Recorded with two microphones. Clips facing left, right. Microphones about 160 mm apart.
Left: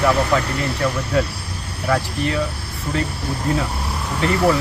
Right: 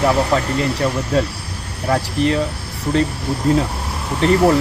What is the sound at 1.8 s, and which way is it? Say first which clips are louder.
Speech: right 3 dB; 30° right (ahead or behind).